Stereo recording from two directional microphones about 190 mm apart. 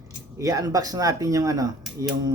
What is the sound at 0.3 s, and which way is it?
Speech, 20° right (ahead or behind).